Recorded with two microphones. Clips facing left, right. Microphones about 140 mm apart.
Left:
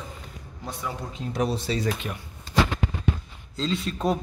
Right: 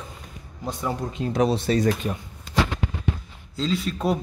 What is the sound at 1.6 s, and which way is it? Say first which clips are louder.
Speech: right 6 dB; 45° right (ahead or behind).